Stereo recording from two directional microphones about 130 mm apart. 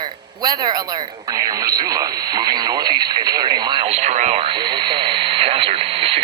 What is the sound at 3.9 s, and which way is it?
Speech, 60° right (ahead or behind).